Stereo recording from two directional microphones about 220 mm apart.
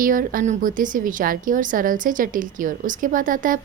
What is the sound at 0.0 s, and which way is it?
A woman's voice, 40° right (ahead or behind).